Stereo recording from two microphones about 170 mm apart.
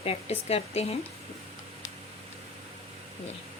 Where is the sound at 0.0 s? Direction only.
35° left (ahead or behind).